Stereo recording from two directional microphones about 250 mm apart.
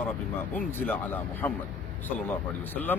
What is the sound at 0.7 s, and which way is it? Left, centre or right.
Speech, centre.